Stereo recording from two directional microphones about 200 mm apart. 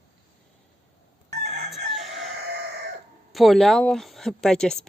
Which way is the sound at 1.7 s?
Centre (ahead or behind).